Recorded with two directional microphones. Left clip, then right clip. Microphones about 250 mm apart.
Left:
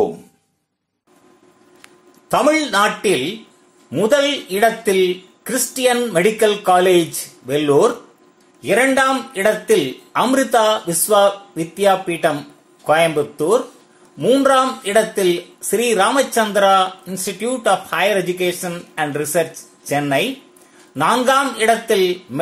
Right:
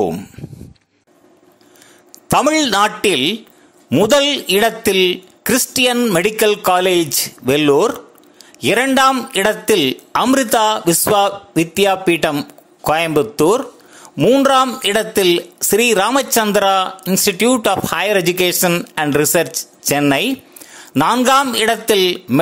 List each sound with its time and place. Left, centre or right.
2.3 s speech: right